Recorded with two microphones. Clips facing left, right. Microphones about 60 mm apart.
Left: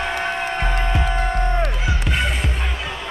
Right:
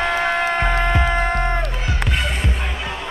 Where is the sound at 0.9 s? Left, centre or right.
Right.